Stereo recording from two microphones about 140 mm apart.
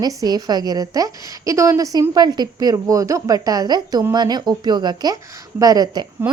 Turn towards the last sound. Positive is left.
turn(degrees=-15)  # may be behind; listen again after turning